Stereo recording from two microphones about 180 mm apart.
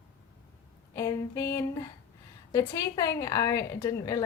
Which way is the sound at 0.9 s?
15° left (ahead or behind).